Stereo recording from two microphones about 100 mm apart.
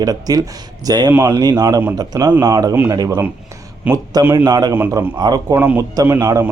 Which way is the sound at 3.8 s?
15° right (ahead or behind).